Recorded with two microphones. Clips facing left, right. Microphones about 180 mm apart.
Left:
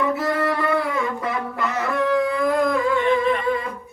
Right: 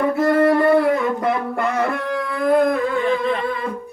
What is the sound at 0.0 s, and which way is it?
Music, 50° right (ahead or behind).